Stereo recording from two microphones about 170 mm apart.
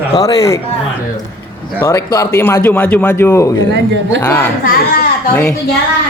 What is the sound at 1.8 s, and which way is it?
A man's voice, 15° left (ahead or behind).